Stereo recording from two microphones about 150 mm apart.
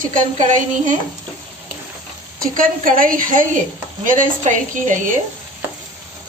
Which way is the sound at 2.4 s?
65° right (ahead or behind).